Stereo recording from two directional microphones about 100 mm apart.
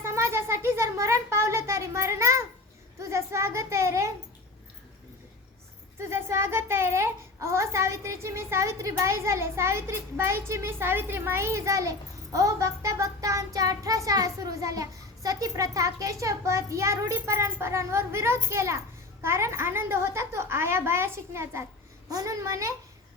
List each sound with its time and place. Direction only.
0.0 s a sound: 25° right (ahead or behind)
3.0 s a child's voice: 30° right (ahead or behind)
6.0 s a child's voice: 25° right (ahead or behind)
22.1 s a child's voice: 35° right (ahead or behind)